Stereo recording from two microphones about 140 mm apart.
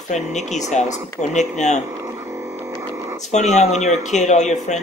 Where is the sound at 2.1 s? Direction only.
20° right (ahead or behind).